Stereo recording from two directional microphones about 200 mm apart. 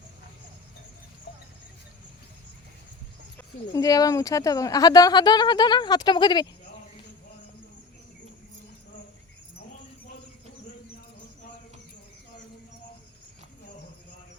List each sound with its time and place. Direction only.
3.3 s speech: 15° left (ahead or behind)